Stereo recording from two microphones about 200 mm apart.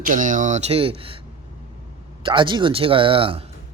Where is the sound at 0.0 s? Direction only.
40° right (ahead or behind).